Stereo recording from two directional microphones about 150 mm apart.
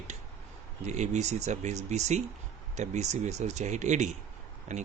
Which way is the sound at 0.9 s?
50° right (ahead or behind).